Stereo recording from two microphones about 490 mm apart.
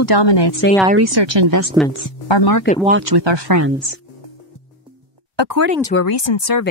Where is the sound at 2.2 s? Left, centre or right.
Left.